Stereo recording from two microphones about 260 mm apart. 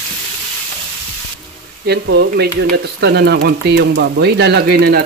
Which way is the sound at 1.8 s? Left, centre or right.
Right.